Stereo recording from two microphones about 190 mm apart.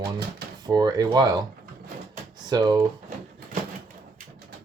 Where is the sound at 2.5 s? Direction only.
20° right (ahead or behind).